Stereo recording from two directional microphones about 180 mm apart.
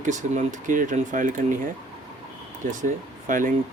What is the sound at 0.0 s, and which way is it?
Speech, 45° right (ahead or behind).